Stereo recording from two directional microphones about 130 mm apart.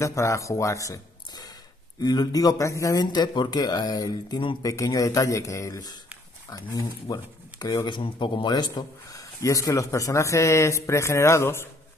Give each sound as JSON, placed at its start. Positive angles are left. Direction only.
{"t": 0.0, "sound": "speech", "side_deg": 20}